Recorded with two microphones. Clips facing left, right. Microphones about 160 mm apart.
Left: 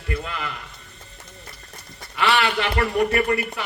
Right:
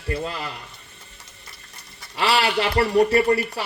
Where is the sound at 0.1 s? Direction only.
35° right (ahead or behind).